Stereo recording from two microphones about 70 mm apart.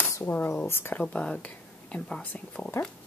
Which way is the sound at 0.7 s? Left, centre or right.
Left.